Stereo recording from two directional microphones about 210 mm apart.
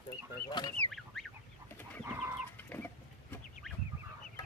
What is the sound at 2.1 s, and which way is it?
Bird, 10° right (ahead or behind).